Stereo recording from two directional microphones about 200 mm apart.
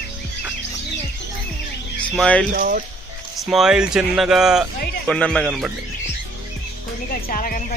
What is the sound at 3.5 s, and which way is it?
Speech, 5° right (ahead or behind).